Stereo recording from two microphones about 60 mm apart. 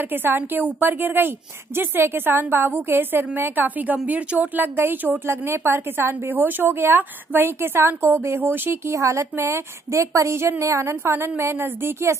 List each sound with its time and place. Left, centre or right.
0.1 s a woman's voice: right
5.2 s a woman's voice: right
8.9 s a woman's voice: right